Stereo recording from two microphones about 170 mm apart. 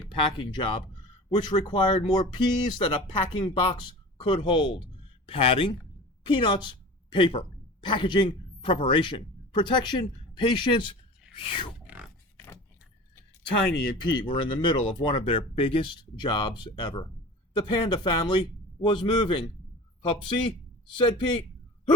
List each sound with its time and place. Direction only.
0.2 s a woman's voice: 30° left (ahead or behind)
14.2 s speech: 30° left (ahead or behind)